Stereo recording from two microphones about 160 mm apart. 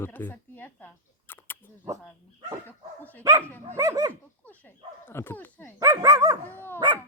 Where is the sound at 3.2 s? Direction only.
15° right (ahead or behind).